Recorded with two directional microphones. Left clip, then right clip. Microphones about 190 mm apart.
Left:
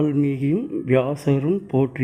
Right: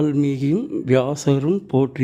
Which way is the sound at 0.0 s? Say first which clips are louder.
Right 1 dB; 20° right (ahead or behind).